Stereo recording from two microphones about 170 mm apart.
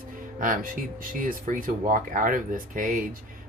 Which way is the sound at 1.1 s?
55° right (ahead or behind).